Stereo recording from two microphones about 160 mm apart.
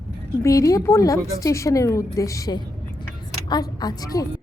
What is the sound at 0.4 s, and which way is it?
A woman's voice, 20° left (ahead or behind).